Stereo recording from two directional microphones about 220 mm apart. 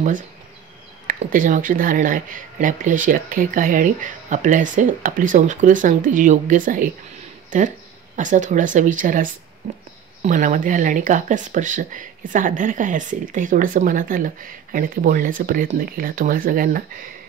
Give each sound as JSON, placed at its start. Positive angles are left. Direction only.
{"t": 1.0, "sound": "speech", "side_deg": -35}